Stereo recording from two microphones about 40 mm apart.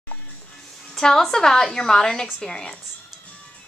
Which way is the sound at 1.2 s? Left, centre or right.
Centre.